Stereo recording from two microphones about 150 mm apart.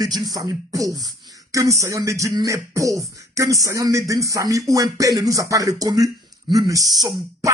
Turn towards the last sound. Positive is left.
turn(degrees=-25)  # may be behind; listen again after turning